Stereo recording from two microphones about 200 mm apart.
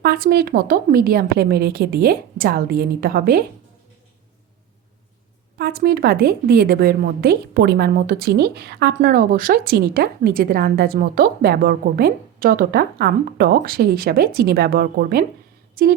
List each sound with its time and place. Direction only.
0.0 s a woman's voice: 50° right (ahead or behind)
5.5 s a woman's voice: 50° right (ahead or behind)